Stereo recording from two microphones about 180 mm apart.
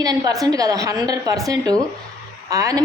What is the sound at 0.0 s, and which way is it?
A woman's voice, 20° right (ahead or behind).